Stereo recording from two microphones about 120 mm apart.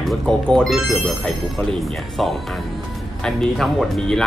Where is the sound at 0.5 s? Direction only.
5° left (ahead or behind).